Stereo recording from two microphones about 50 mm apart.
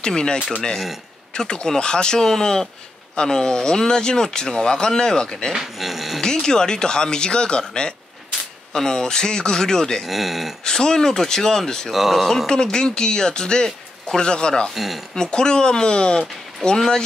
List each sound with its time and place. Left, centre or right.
0.0 s speech: centre
5.5 s speech: centre
6.2 s speech: centre
10.0 s speech: centre
10.6 s speech: centre
11.9 s speech: centre
12.4 s speech: centre
14.7 s speech: centre
15.1 s speech: centre